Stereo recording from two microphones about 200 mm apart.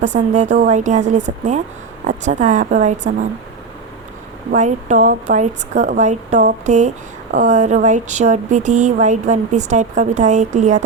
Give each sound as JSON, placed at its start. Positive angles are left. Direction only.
{"t": 0.0, "sound": "a woman's voice", "side_deg": -35}
{"t": 4.5, "sound": "a woman's voice", "side_deg": -40}